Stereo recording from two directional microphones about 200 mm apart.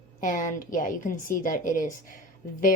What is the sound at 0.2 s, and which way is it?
A woman's voice, 40° left (ahead or behind).